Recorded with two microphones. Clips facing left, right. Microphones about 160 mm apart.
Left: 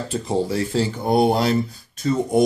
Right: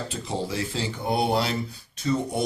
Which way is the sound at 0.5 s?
45° left (ahead or behind).